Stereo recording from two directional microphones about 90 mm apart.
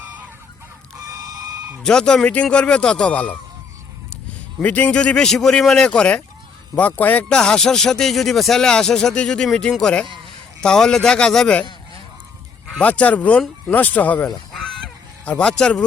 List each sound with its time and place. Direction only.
0.9 s a sound: 45° right (ahead or behind)
1.8 s speech: 10° left (ahead or behind)
4.6 s speech: 15° left (ahead or behind)
7.3 s speech: 10° left (ahead or behind)
12.8 s speech: 15° left (ahead or behind)
14.3 s goose: 5° left (ahead or behind)
15.3 s speech: 10° left (ahead or behind)